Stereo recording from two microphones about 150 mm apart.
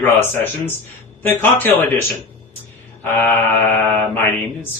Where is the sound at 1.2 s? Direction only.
15° left (ahead or behind).